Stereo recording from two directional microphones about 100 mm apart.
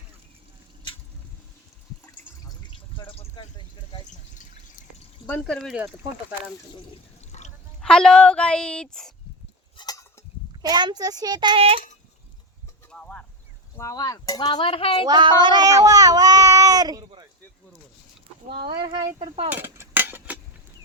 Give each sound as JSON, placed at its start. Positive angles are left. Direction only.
{"t": 2.6, "sound": "water", "side_deg": 55}
{"t": 5.4, "sound": "speech", "side_deg": 5}
{"t": 7.8, "sound": "speech", "side_deg": 5}
{"t": 9.7, "sound": "a sound", "side_deg": 35}
{"t": 10.6, "sound": "speech", "side_deg": -45}
{"t": 11.5, "sound": "speech", "side_deg": -70}
{"t": 12.9, "sound": "a sound", "side_deg": 10}
{"t": 13.7, "sound": "speech", "side_deg": 35}
{"t": 14.6, "sound": "a sound", "side_deg": 70}
{"t": 15.0, "sound": "speech", "side_deg": -45}
{"t": 18.6, "sound": "speech", "side_deg": -55}
{"t": 19.5, "sound": "cutlery", "side_deg": -20}